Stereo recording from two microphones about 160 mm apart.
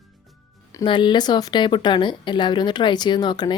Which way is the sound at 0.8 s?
30° left (ahead or behind).